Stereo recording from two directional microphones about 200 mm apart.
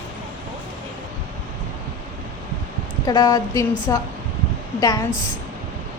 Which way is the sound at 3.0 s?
20° left (ahead or behind).